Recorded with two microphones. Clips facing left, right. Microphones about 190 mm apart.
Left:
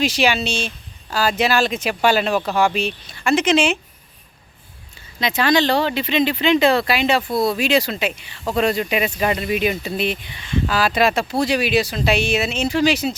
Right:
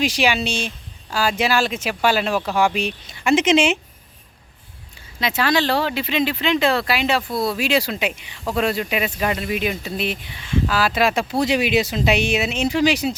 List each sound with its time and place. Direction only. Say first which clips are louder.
0.0 s speech: left 1 dB; 15° right (ahead or behind)
5.2 s speech: left 2 dB; 5° right (ahead or behind)
7.2 s speech: left 3 dB; 25° left (ahead or behind)
7.4 s speech: left 2 dB; 5° right (ahead or behind)